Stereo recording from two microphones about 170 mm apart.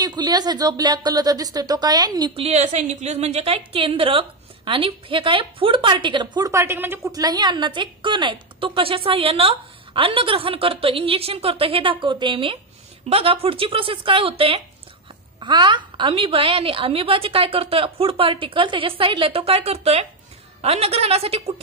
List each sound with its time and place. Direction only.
0.0 s speech: 25° right (ahead or behind)
2.4 s a woman's voice: 40° right (ahead or behind)